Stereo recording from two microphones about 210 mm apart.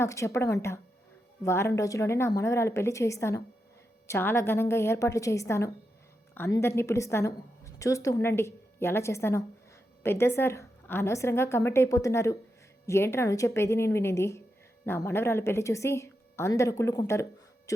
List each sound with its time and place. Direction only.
0.0 s a woman's voice: 15° left (ahead or behind)